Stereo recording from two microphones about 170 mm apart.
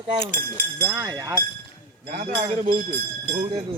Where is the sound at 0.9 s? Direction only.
15° right (ahead or behind).